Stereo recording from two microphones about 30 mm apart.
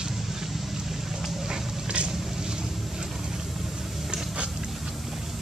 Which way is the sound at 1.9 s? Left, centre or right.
Right.